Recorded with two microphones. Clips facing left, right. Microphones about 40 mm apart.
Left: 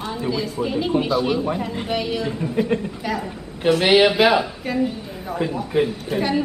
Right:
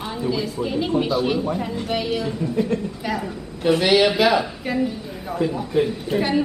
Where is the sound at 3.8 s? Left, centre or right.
Left.